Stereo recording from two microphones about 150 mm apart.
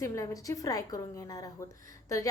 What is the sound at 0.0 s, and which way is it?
A woman's voice, 20° left (ahead or behind).